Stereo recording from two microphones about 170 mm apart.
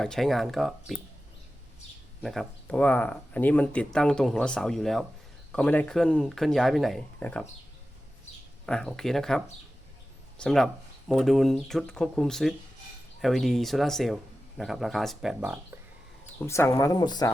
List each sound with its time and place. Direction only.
0.0 s speech: 5° left (ahead or behind)
2.2 s speech: centre (ahead or behind)
8.6 s speech: 5° left (ahead or behind)
16.4 s speech: 15° left (ahead or behind)